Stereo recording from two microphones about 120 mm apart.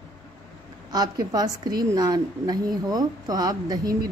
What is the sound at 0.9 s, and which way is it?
A woman's voice, 35° right (ahead or behind).